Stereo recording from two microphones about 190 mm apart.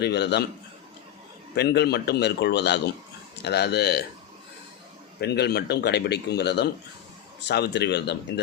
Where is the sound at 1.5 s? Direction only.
60° left (ahead or behind).